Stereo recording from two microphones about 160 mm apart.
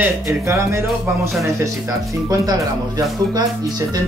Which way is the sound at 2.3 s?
20° right (ahead or behind).